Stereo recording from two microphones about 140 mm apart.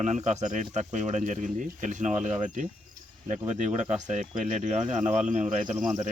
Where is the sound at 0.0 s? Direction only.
55° right (ahead or behind).